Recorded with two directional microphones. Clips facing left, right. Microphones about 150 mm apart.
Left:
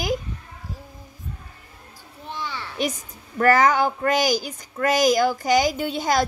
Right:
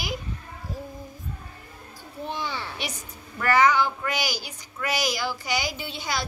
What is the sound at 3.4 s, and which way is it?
Speech, 45° left (ahead or behind).